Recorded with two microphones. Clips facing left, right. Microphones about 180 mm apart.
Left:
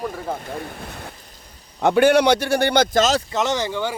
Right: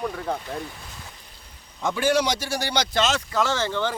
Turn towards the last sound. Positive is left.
turn(degrees=15)  # may be behind; listen again after turning